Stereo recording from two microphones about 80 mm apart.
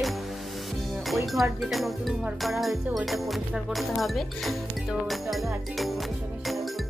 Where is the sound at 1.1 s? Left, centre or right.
Centre.